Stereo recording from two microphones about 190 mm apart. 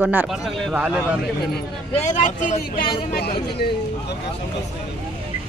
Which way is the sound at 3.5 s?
60° left (ahead or behind).